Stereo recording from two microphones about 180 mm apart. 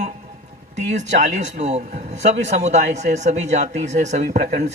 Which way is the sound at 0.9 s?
40° right (ahead or behind).